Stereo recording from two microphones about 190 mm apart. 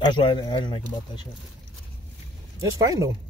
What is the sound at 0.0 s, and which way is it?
Speech, 25° left (ahead or behind).